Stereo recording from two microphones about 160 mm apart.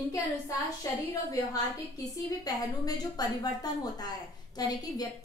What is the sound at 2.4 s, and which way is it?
A woman's voice, 25° left (ahead or behind).